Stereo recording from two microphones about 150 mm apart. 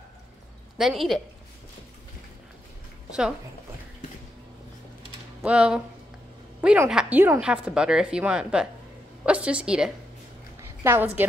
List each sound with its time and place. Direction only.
0.7 s speech: centre (ahead or behind)
3.1 s a sound: 5° right (ahead or behind)
5.4 s a woman's voice: 5° right (ahead or behind)
10.8 s a woman's voice: 15° right (ahead or behind)